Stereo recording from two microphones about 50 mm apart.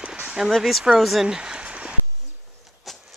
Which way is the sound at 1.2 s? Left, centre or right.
Centre.